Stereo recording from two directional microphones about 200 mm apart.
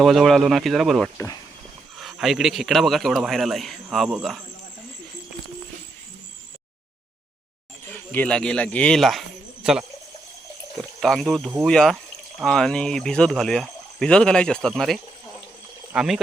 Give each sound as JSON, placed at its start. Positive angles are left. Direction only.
{"t": 0.0, "sound": "speech", "side_deg": 0}
{"t": 8.1, "sound": "speech", "side_deg": 5}